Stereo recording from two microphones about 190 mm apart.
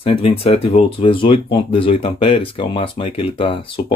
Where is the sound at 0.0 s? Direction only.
30° left (ahead or behind).